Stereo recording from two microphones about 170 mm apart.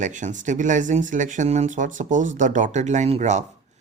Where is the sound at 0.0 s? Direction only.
45° right (ahead or behind).